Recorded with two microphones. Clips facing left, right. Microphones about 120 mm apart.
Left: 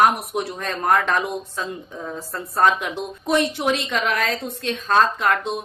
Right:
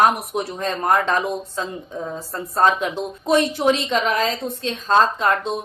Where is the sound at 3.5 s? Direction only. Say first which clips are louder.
Right 4 dB; 30° right (ahead or behind).